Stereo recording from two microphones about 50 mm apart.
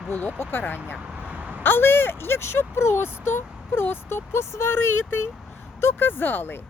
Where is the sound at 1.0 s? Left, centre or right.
Right.